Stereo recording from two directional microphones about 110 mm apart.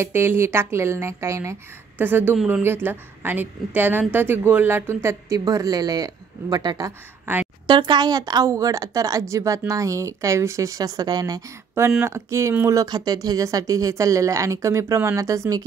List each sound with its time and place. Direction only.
0.0 s a woman's voice: 20° right (ahead or behind)